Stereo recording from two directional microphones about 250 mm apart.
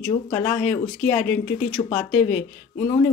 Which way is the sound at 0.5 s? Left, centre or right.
Centre.